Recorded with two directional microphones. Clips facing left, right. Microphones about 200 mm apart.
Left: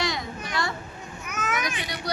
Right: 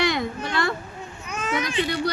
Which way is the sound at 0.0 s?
60° right (ahead or behind).